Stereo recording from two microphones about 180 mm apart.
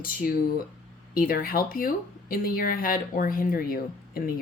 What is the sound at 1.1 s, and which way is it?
Speech, 50° left (ahead or behind).